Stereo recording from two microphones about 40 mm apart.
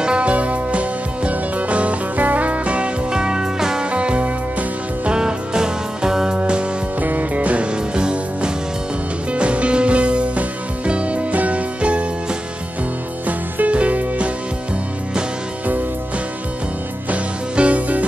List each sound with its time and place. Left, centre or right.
0.0 s music: right
3.1 s music: centre
3.9 s music: right
5.1 s music: centre
7.0 s music: right
7.9 s music: right
13.3 s music: right
17.1 s music: right